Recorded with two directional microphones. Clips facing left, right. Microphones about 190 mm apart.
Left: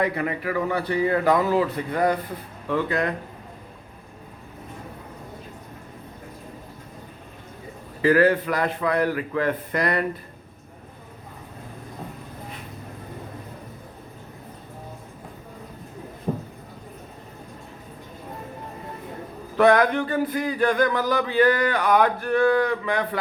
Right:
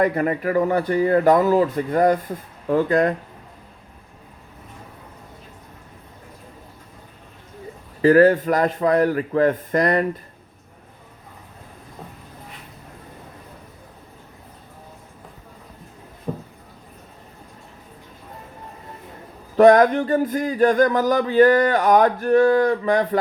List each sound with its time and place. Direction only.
0.0 s speech: 45° right (ahead or behind)
8.0 s speech: 40° right (ahead or behind)
16.3 s a sound: 20° left (ahead or behind)
19.5 s speech: 40° right (ahead or behind)